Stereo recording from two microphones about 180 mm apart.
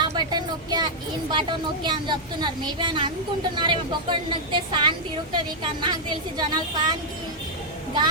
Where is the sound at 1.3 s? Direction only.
25° right (ahead or behind).